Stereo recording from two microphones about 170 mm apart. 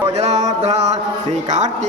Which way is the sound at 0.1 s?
40° right (ahead or behind).